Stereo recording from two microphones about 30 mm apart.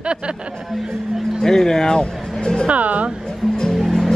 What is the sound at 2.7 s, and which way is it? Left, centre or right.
Speech, right.